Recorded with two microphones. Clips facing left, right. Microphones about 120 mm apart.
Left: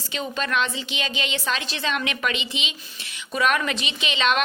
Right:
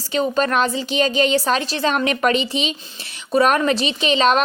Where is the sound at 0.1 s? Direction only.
40° right (ahead or behind).